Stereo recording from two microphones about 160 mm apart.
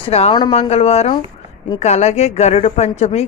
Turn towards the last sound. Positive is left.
turn(degrees=45)  # may be behind; listen again after turning